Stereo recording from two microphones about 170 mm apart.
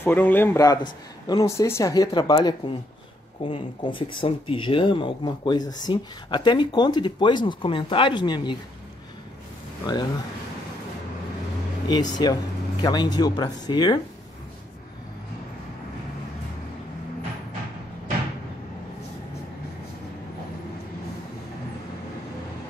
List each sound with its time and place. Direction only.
0.0 s speech: 10° left (ahead or behind); by 8.5 s 25° left (ahead or behind)
9.9 s speech: 25° left (ahead or behind)
11.9 s speech: 25° left (ahead or behind)